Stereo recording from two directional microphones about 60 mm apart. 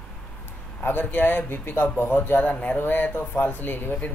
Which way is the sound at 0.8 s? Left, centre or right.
Left.